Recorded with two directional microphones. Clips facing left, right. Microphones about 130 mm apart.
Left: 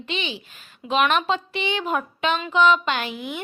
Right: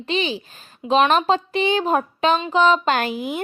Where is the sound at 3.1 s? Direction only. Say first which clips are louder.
Right 6 dB; centre (ahead or behind).